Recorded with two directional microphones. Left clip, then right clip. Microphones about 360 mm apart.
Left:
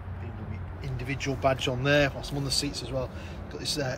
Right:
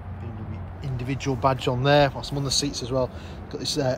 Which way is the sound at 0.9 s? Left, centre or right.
Centre.